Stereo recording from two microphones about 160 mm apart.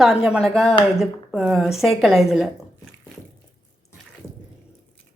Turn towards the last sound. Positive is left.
turn(degrees=5)  # may be behind; listen again after turning